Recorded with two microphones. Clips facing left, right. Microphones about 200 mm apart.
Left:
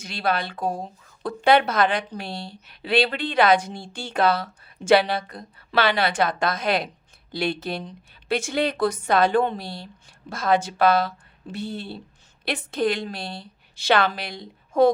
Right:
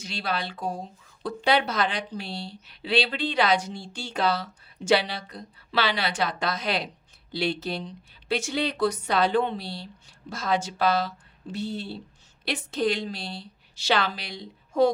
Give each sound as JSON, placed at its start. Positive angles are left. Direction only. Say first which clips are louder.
{"t": 0.0, "sound": "a woman's voice", "louder": "left 5 dB", "side_deg": 55}